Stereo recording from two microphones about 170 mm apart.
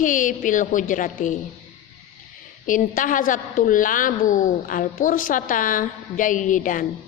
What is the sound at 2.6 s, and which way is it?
A woman's voice, 50° left (ahead or behind).